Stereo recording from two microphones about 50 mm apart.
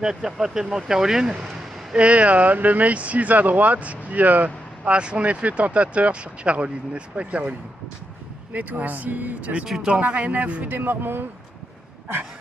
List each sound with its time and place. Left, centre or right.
0.0 s speech: centre
2.0 s speech: right
8.5 s speech: right
9.7 s speech: centre
9.9 s speech: right
10.9 s speech: right